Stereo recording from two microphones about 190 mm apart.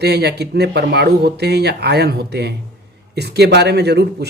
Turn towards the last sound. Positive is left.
turn(degrees=-60)  # may be behind; listen again after turning